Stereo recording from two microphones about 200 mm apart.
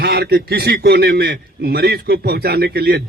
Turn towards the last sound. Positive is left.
turn(degrees=-50)  # may be behind; listen again after turning